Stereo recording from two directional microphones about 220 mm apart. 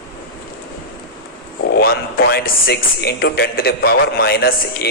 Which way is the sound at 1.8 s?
45° left (ahead or behind).